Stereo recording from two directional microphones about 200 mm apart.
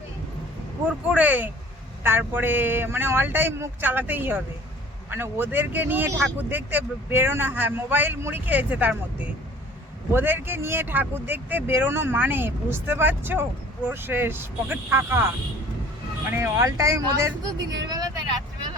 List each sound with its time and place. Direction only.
0.9 s speech: 5° right (ahead or behind)
16.3 s speech: 15° right (ahead or behind)
17.8 s vehicle: 20° right (ahead or behind)